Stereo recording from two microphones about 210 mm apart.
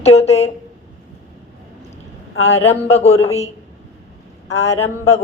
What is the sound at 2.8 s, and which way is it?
Speech, 30° left (ahead or behind).